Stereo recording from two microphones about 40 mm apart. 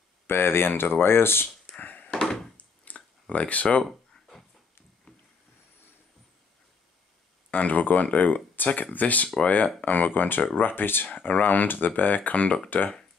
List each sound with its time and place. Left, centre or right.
0.3 s speech: left
1.8 s a sound: left
2.5 s clicking: left
3.8 s a sound: centre
7.5 s speech: left
12.6 s speech: left